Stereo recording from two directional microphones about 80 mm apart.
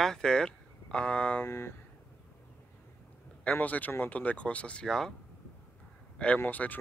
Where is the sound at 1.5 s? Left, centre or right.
Left.